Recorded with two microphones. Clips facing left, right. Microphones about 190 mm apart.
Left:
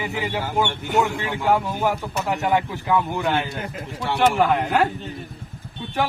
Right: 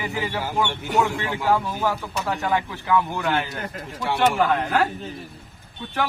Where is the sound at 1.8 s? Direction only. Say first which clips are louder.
Left 2 dB; 15° left (ahead or behind).